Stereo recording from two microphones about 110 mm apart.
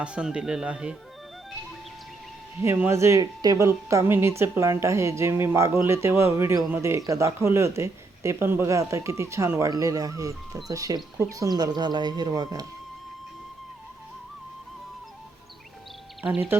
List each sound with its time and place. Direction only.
0.0 s speech: 10° right (ahead or behind)
2.6 s speech: 25° right (ahead or behind)
16.2 s speech: 20° right (ahead or behind)